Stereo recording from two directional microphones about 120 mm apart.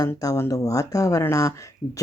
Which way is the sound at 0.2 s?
25° left (ahead or behind).